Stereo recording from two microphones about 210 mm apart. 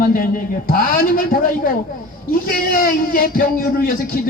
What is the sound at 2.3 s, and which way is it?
A man's voice, 45° left (ahead or behind).